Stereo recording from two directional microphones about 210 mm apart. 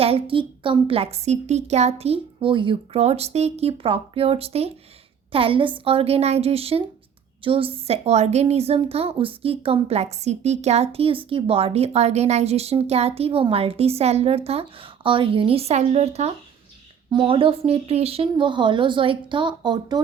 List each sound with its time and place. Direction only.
0.0 s a woman's voice: 25° right (ahead or behind)